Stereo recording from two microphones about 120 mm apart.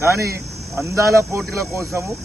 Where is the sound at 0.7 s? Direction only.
20° right (ahead or behind).